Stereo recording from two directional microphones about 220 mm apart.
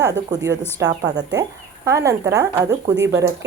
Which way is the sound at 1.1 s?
15° right (ahead or behind).